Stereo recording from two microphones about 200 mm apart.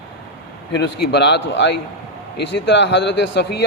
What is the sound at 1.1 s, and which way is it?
A man's voice, 60° left (ahead or behind).